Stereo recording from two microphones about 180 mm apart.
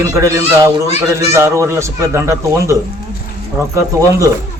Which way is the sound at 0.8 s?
35° left (ahead or behind).